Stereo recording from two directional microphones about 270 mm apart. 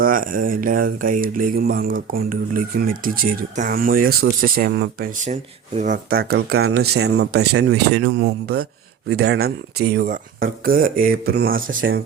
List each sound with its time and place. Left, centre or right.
0.0 s speech: right
11.8 s speech: right